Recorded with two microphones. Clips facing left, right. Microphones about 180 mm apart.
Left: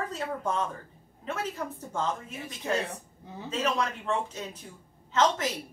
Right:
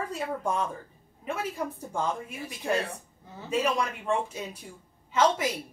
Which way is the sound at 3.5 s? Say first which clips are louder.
Right 2 dB; 10° right (ahead or behind).